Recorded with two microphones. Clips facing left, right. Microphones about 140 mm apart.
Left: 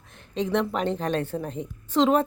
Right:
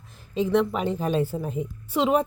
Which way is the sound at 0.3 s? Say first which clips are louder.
Right 2 dB; centre (ahead or behind).